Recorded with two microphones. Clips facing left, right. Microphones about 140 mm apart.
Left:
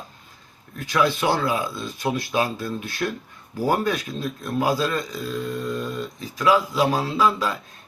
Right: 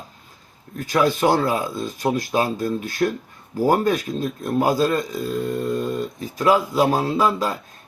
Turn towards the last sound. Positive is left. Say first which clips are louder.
# right 1 dB
turn(degrees=-45)  # may be behind; listen again after turning